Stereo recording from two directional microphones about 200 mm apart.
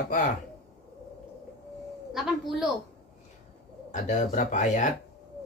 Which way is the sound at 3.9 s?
35° left (ahead or behind).